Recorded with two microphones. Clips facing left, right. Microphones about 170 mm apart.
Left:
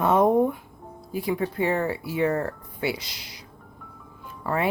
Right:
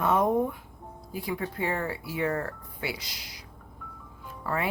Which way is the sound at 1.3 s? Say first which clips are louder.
Left 6 dB; 25° left (ahead or behind).